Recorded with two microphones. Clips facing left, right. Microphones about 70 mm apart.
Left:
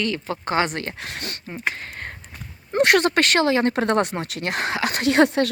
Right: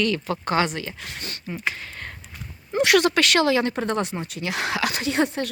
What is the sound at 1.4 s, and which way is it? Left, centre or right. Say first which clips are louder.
Speech: even; left.